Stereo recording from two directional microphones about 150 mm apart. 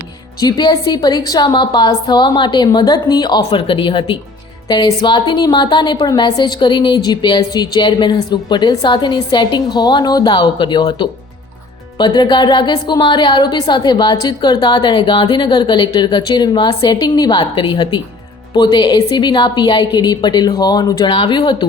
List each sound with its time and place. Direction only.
0.3 s a woman's voice: 25° left (ahead or behind)